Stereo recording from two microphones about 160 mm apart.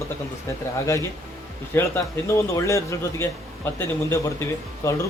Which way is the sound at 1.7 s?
15° left (ahead or behind).